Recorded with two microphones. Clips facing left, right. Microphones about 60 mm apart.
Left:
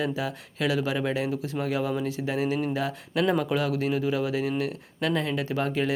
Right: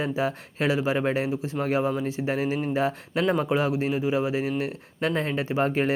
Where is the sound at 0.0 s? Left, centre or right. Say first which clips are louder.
Right 3 dB; right.